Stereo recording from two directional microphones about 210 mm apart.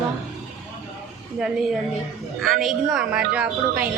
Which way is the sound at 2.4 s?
Centre (ahead or behind).